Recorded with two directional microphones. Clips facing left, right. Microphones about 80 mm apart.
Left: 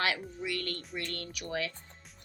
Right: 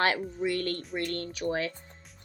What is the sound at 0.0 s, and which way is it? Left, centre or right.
A woman's voice, right.